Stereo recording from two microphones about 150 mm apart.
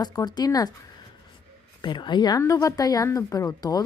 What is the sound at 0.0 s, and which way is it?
Speech, 25° left (ahead or behind).